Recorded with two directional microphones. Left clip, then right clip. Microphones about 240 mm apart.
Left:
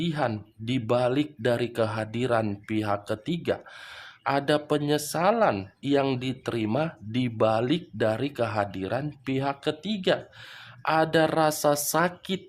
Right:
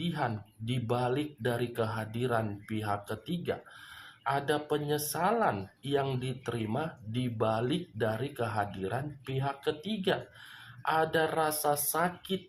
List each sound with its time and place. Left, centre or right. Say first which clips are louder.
0.0 s speech: left 6 dB; left